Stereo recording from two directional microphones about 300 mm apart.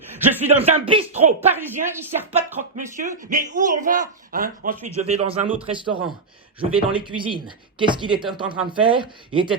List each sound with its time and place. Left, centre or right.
0.4 s speech: right
1.5 s speech: centre
2.6 s speech: right